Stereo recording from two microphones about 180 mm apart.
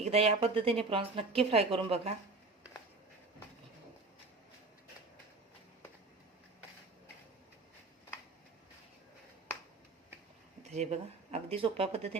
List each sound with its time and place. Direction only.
0.0 s speech: 35° right (ahead or behind)
10.6 s speech: 40° right (ahead or behind)